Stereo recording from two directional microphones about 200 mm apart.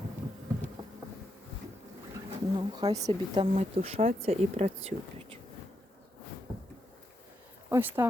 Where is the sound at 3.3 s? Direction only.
30° right (ahead or behind).